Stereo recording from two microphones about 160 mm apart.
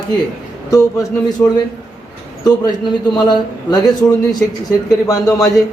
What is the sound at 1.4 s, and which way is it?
Speech, 20° left (ahead or behind).